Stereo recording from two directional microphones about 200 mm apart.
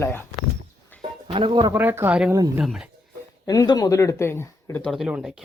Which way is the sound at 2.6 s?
Centre (ahead or behind).